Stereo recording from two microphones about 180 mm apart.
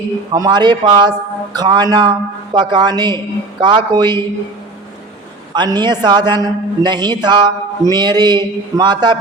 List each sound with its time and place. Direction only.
0.3 s a man's voice: 25° right (ahead or behind)
5.5 s a man's voice: 25° right (ahead or behind)